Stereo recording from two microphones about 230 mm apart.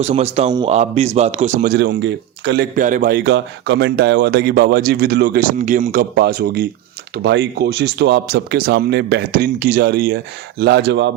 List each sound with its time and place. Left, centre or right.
0.0 s a man's voice: right
3.2 s a man's voice: right